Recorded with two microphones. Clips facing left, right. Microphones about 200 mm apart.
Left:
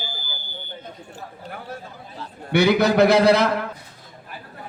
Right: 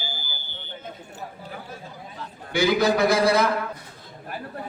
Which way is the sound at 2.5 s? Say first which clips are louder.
Left 3 dB; 65° left (ahead or behind).